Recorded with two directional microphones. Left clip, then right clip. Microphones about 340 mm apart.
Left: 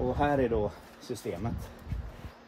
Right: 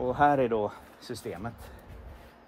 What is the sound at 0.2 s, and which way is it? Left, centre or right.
Speech, right.